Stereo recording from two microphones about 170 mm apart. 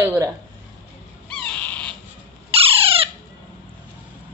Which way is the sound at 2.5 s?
35° right (ahead or behind).